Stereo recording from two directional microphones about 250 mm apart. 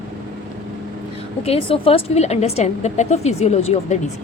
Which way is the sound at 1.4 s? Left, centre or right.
Left.